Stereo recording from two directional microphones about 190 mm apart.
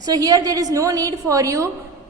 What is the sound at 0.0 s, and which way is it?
A woman's voice, 20° right (ahead or behind).